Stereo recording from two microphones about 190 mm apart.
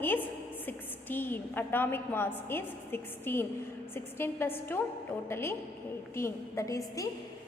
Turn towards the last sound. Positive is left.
turn(degrees=15)  # may be behind; listen again after turning